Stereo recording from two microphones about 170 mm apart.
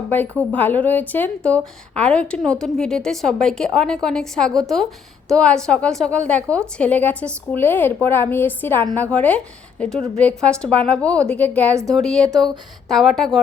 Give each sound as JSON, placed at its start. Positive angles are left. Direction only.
{"t": 0.1, "sound": "a woman's voice", "side_deg": 10}
{"t": 11.7, "sound": "speech", "side_deg": -20}
{"t": 11.9, "sound": "speech", "side_deg": 5}